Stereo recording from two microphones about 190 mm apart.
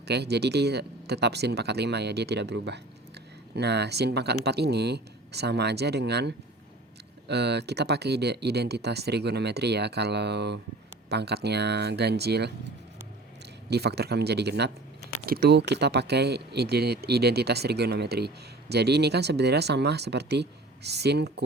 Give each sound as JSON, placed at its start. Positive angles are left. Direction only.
{"t": 0.1, "sound": "speech", "side_deg": -60}
{"t": 13.7, "sound": "speech", "side_deg": -60}